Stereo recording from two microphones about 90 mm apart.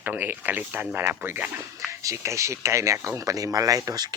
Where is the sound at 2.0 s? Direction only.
35° right (ahead or behind).